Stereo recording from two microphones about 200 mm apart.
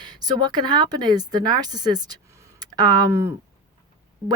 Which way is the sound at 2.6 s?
20° right (ahead or behind).